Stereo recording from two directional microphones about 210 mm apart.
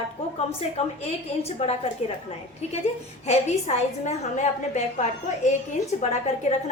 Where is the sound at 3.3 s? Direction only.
30° left (ahead or behind).